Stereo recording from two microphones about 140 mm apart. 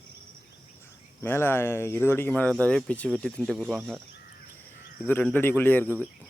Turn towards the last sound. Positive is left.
turn(degrees=15)  # may be behind; listen again after turning